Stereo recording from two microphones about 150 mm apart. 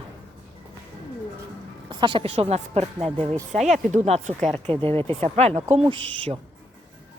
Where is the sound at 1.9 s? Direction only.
30° right (ahead or behind); by 5.8 s 45° right (ahead or behind).